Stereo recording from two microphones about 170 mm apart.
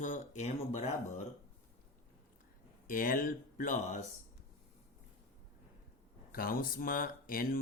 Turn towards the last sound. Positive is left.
turn(degrees=55)  # may be behind; listen again after turning